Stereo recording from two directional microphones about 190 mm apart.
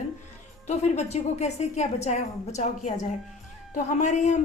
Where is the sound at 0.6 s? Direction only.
35° left (ahead or behind).